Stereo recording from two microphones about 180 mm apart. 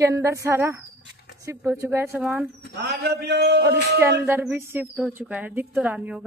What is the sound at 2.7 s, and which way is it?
Speech, 65° right (ahead or behind).